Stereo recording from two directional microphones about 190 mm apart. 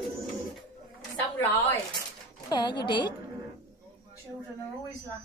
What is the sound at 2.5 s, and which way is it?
Speech, 25° left (ahead or behind).